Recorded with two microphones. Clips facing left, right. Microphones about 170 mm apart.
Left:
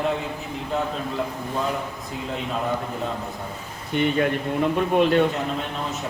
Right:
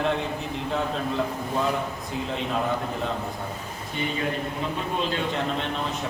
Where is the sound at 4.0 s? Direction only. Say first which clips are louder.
Left 7 dB; 65° left (ahead or behind).